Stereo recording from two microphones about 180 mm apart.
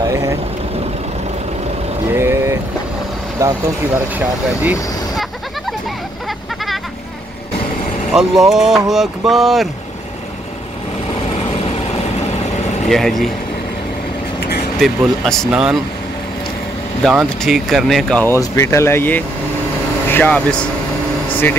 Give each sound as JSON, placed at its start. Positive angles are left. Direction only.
{"t": 0.0, "sound": "vehicle", "side_deg": -15}
{"t": 2.1, "sound": "vehicle", "side_deg": -15}
{"t": 3.3, "sound": "speech", "side_deg": -15}
{"t": 8.1, "sound": "speech", "side_deg": 0}
{"t": 12.8, "sound": "speech", "side_deg": 0}
{"t": 14.8, "sound": "speech", "side_deg": 0}
{"t": 17.1, "sound": "speech", "side_deg": 0}